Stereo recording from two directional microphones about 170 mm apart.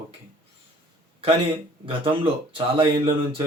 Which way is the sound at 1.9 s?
30° right (ahead or behind).